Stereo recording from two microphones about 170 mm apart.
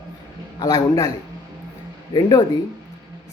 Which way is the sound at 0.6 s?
20° left (ahead or behind).